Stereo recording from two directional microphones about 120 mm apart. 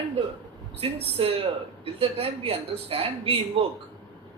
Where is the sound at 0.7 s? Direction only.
55° right (ahead or behind).